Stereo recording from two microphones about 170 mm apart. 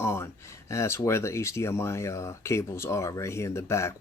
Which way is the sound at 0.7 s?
15° left (ahead or behind).